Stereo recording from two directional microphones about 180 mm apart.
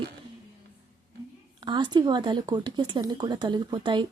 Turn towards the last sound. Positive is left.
turn(degrees=-25)  # may be behind; listen again after turning